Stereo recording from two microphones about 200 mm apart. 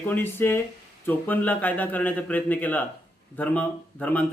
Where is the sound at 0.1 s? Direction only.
10° left (ahead or behind).